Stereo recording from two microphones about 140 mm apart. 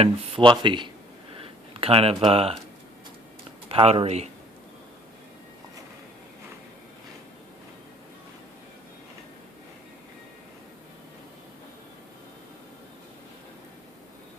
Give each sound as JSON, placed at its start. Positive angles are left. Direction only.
{"t": 0.0, "sound": "speech", "side_deg": -35}
{"t": 1.4, "sound": "a sound", "side_deg": -40}
{"t": 3.7, "sound": "speech", "side_deg": -45}